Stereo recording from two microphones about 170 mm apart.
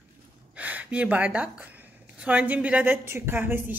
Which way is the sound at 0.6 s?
10° right (ahead or behind).